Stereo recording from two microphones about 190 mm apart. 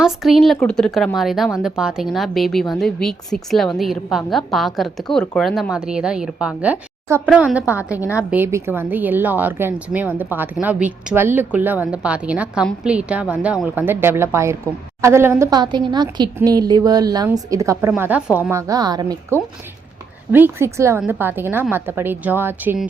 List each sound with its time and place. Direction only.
0.0 s a woman's voice: centre (ahead or behind)